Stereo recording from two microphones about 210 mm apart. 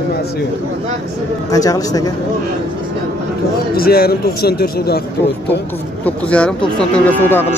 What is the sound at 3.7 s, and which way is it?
A man's voice, 45° left (ahead or behind).